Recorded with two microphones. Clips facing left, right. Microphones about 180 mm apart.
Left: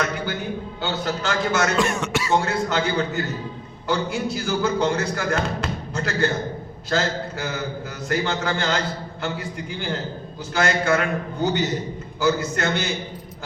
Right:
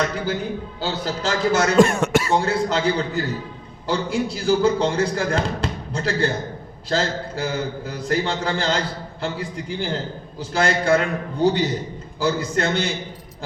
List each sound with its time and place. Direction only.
0.8 s a man's voice: 35° right (ahead or behind)
1.8 s speech: 50° right (ahead or behind)
2.3 s a man's voice: 35° right (ahead or behind)